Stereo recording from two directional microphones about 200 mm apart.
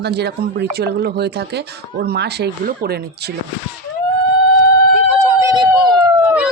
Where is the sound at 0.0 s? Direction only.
55° right (ahead or behind).